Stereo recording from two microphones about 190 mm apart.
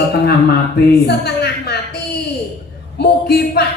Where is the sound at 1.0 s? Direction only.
60° left (ahead or behind).